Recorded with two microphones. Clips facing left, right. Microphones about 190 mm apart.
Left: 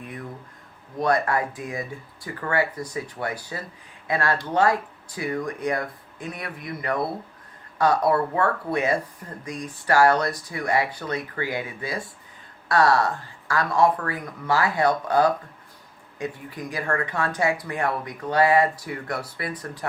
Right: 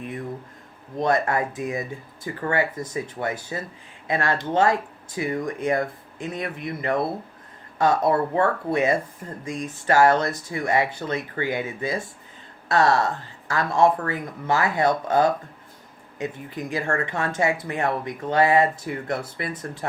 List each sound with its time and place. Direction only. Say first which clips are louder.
0.9 s speech: right 1 dB; 25° right (ahead or behind)